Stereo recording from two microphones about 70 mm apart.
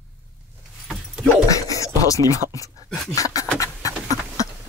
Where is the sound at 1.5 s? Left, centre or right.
Left.